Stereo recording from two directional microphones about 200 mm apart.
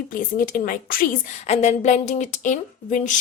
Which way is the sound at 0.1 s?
45° left (ahead or behind).